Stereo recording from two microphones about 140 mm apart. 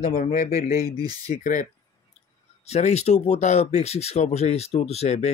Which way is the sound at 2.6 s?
50° left (ahead or behind).